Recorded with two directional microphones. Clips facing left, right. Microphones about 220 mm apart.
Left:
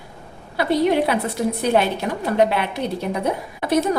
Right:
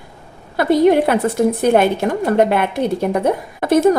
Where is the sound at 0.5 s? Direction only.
50° right (ahead or behind).